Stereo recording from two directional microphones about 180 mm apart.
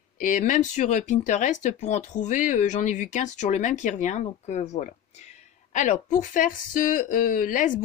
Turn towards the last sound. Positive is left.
turn(degrees=45)  # may be behind; listen again after turning